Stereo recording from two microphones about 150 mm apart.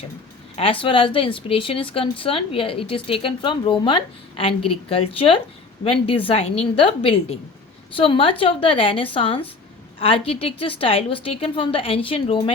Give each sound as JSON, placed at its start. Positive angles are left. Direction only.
{"t": 0.5, "sound": "speech", "side_deg": 40}